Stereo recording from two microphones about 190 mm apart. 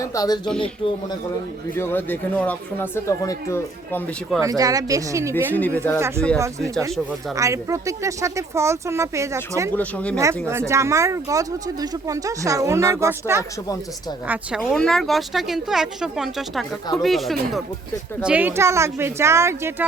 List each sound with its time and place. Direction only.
0.0 s speech: 15° left (ahead or behind)
1.7 s speech: 10° left (ahead or behind)
4.4 s speech: 20° right (ahead or behind)
5.5 s speech: 10° left (ahead or behind)
6.0 s speech: 15° right (ahead or behind)
7.3 s speech: 15° right (ahead or behind)
9.7 s speech: 5° left (ahead or behind)
10.2 s speech: 15° right (ahead or behind)
14.6 s speech: 5° left (ahead or behind); by 19.7 s 15° right (ahead or behind)